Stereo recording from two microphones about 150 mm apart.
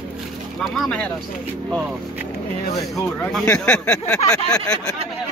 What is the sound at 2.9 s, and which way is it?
Speech, 5° left (ahead or behind).